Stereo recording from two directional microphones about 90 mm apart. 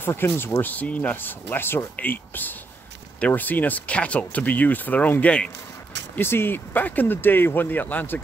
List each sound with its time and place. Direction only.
0.0 s speech: 25° left (ahead or behind)
6.1 s speech: 25° left (ahead or behind)